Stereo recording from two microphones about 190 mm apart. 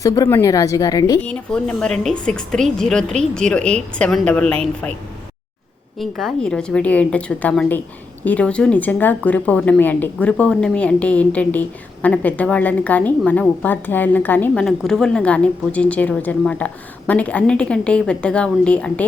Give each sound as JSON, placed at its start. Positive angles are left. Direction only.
{"t": 0.0, "sound": "a woman's voice", "side_deg": 20}
{"t": 1.2, "sound": "a woman's voice", "side_deg": 5}
{"t": 6.0, "sound": "a woman's voice", "side_deg": 0}